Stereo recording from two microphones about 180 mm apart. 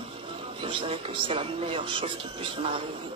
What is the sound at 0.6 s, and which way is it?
A man's voice, 30° right (ahead or behind).